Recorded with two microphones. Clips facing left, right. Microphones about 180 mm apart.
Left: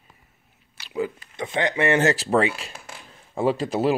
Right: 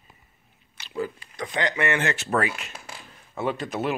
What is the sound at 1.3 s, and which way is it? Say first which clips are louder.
Speech: left 3 dB; 25° left (ahead or behind).